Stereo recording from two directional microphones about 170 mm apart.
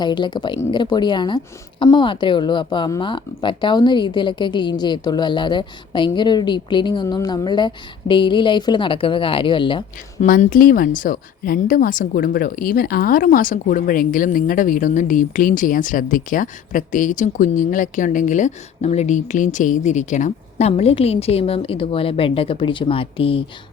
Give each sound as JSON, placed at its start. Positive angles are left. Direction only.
{"t": 0.0, "sound": "speech", "side_deg": 25}
{"t": 10.2, "sound": "speech", "side_deg": 50}